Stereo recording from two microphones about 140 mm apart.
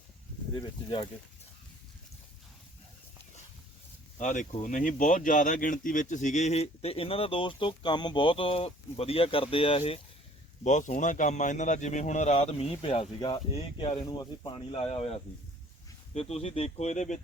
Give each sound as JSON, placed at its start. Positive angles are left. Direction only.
{"t": 0.5, "sound": "speech", "side_deg": 35}
{"t": 4.2, "sound": "speech", "side_deg": 60}
{"t": 10.6, "sound": "speech", "side_deg": 60}